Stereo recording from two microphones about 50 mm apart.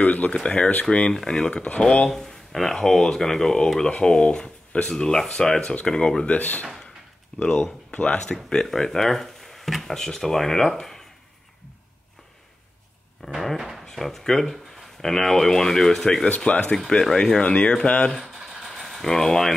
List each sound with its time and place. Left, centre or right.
0.0 s speech: left
6.3 s speech: left
8.5 s speech: centre
13.2 s a sound: centre
13.6 s drawer open or close: centre
13.8 s speech: centre
18.2 s mechanisms: centre
18.7 s a sound: centre